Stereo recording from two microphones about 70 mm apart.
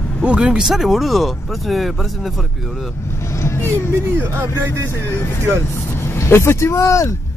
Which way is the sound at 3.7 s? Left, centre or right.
Right.